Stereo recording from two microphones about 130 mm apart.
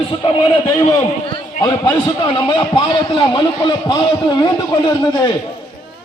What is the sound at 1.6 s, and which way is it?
A man's voice, 35° left (ahead or behind).